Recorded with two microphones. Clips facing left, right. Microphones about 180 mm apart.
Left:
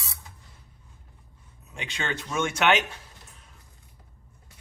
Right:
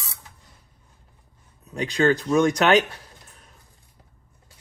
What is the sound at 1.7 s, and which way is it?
Speech, 40° right (ahead or behind).